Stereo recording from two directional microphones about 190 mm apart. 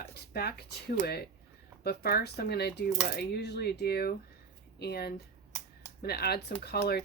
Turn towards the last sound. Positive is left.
turn(degrees=55)  # may be behind; listen again after turning